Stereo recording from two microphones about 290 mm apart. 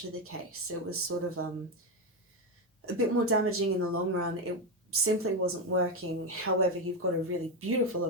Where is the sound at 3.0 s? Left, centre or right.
Right.